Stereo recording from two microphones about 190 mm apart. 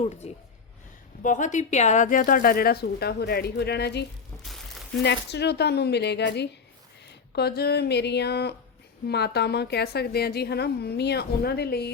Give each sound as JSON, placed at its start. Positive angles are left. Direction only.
{"t": 0.0, "sound": "speech", "side_deg": 35}
{"t": 5.0, "sound": "a woman's voice", "side_deg": 60}